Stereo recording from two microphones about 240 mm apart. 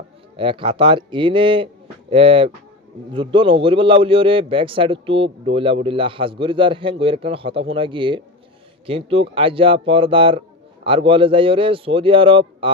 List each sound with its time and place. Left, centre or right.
0.3 s a man's voice: right